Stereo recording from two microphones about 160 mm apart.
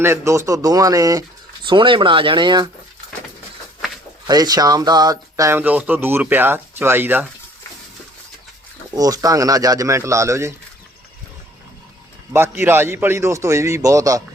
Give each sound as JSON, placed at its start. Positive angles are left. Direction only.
{"t": 0.0, "sound": "speech", "side_deg": -15}
{"t": 4.3, "sound": "speech", "side_deg": -25}
{"t": 9.0, "sound": "speech", "side_deg": -25}
{"t": 12.3, "sound": "speech", "side_deg": -15}